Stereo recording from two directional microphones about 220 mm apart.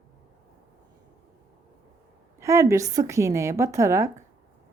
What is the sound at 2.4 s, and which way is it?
Speech, 15° right (ahead or behind).